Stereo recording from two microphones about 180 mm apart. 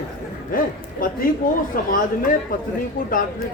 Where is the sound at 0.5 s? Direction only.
55° left (ahead or behind).